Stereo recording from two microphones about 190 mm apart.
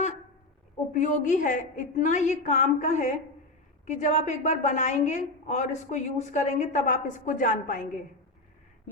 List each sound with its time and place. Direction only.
0.9 s a woman's voice: 40° left (ahead or behind)